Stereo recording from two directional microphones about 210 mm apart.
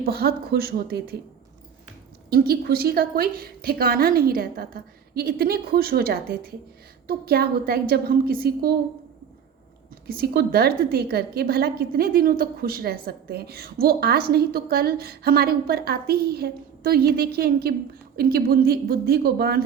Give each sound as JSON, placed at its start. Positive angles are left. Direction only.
{"t": 0.0, "sound": "a woman's voice", "side_deg": -45}
{"t": 2.3, "sound": "a woman's voice", "side_deg": -45}
{"t": 10.1, "sound": "a woman's voice", "side_deg": -45}